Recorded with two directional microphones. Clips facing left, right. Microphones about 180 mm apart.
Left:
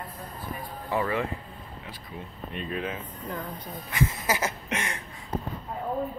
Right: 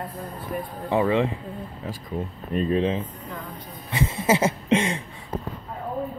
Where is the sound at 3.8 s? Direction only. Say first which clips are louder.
Right 5 dB; 30° right (ahead or behind).